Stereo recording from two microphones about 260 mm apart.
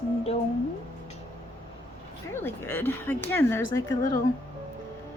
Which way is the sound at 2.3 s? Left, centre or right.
Centre.